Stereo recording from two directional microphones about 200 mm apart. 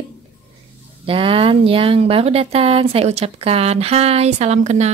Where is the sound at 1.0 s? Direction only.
25° right (ahead or behind).